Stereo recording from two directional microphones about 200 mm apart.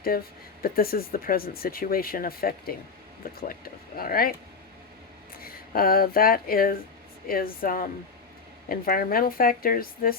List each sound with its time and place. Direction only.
0.6 s speech: 50° left (ahead or behind)
5.4 s speech: 45° left (ahead or behind)